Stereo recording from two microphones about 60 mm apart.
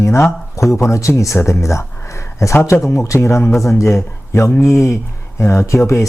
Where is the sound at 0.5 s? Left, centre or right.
Left.